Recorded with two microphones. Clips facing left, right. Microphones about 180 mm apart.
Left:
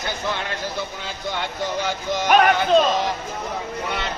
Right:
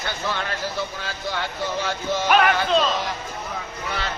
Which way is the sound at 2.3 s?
45° left (ahead or behind).